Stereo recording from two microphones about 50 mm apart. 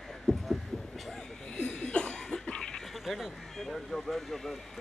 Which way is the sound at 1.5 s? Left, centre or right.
Centre.